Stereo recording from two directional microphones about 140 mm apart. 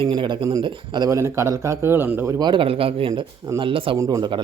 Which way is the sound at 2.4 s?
35° right (ahead or behind).